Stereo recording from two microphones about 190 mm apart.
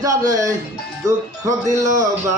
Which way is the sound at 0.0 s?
15° right (ahead or behind).